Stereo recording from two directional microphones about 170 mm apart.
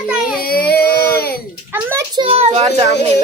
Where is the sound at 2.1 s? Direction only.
30° right (ahead or behind).